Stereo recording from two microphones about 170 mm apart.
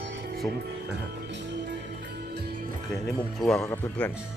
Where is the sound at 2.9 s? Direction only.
Centre (ahead or behind).